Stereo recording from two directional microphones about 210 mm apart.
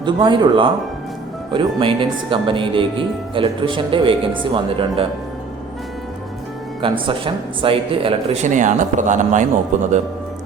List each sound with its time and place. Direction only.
0.0 s speech: 20° right (ahead or behind)
6.8 s speech: 25° right (ahead or behind)